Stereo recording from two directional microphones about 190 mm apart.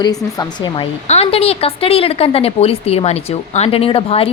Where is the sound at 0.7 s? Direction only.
30° left (ahead or behind).